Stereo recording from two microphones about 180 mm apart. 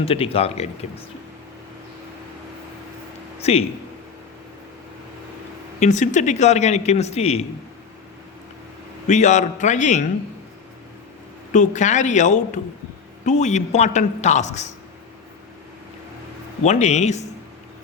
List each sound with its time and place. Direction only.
0.0 s a man's voice: 30° left (ahead or behind)
3.4 s a man's voice: 35° left (ahead or behind)
5.8 s a man's voice: 45° left (ahead or behind)
9.0 s a man's voice: 40° left (ahead or behind)
11.5 s a man's voice: 45° left (ahead or behind)
16.6 s a man's voice: 40° left (ahead or behind)